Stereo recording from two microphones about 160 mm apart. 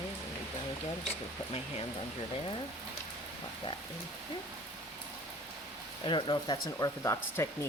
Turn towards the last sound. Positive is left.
turn(degrees=20)  # may be behind; listen again after turning